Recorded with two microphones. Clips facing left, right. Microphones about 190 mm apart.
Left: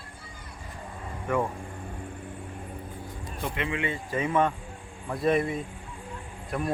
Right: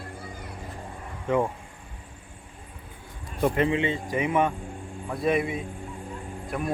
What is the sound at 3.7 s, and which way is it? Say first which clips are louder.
Speech: right 5 dB; 25° right (ahead or behind).